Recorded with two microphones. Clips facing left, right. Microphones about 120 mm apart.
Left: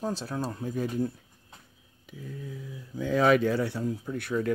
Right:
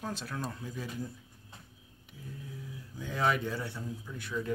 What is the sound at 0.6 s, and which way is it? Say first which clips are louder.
Speech: left 10 dB; 50° left (ahead or behind).